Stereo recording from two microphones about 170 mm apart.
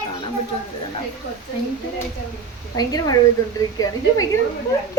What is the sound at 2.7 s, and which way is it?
A woman's voice, 20° left (ahead or behind).